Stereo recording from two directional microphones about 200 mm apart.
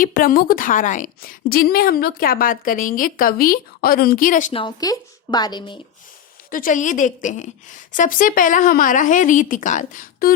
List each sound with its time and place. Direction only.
0.0 s a woman's voice: 45° left (ahead or behind)
4.6 s a woman's voice: 20° left (ahead or behind)
6.5 s a woman's voice: 40° left (ahead or behind)